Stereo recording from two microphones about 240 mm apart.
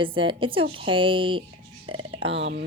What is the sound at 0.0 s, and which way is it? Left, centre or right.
A woman's voice, right.